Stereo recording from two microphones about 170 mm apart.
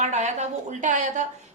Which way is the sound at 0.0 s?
45° right (ahead or behind).